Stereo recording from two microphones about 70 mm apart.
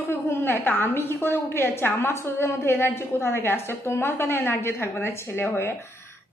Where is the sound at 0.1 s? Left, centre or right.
Left.